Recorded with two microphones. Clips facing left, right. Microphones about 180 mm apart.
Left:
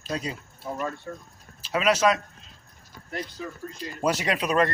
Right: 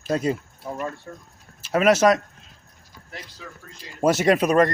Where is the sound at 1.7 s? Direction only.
45° right (ahead or behind).